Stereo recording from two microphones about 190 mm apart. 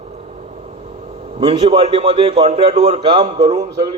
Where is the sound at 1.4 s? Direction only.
30° right (ahead or behind).